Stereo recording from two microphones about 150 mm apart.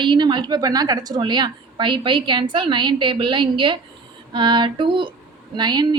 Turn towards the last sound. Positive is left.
turn(degrees=-30)  # may be behind; listen again after turning